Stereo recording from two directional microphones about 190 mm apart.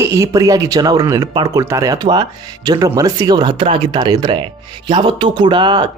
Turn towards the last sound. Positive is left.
turn(degrees=-25)  # may be behind; listen again after turning